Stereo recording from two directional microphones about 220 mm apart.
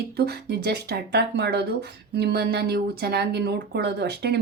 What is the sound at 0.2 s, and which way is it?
Speech, 50° right (ahead or behind).